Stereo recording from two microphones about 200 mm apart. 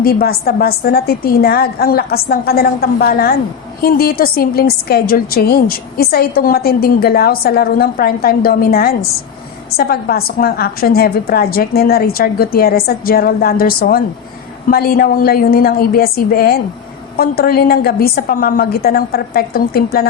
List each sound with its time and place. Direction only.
0.0 s a woman's voice: 50° left (ahead or behind)